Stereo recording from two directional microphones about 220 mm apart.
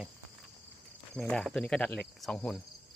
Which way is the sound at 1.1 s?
5° left (ahead or behind).